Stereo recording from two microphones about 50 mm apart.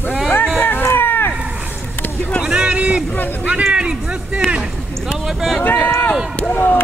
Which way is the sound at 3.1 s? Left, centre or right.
Left.